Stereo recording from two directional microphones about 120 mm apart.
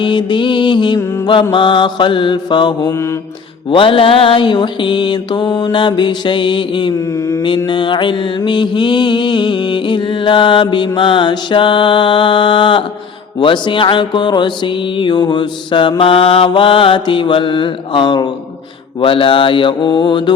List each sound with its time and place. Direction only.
0.0 s music: 40° left (ahead or behind)
0.9 s mantra: 25° left (ahead or behind)
1.3 s music: 40° left (ahead or behind)
2.9 s mantra: 25° left (ahead or behind)
3.7 s music: 45° left (ahead or behind)
7.0 s mantra: 25° left (ahead or behind)
7.7 s music: 40° left (ahead or behind)